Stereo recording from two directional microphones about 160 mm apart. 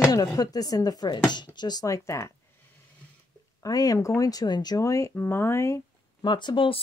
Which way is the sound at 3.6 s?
20° left (ahead or behind).